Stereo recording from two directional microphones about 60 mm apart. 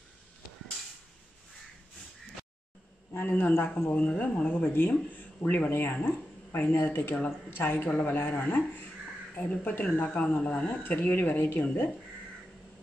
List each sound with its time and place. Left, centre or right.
3.1 s speech: left
3.9 s speech: left
4.6 s speech: left
6.0 s a sound: left
6.7 s speech: left; by 10.7 s centre
10.8 s speech: left